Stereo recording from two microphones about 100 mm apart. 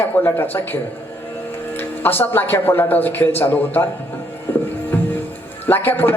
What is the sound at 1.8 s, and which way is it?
A man's voice, 20° left (ahead or behind).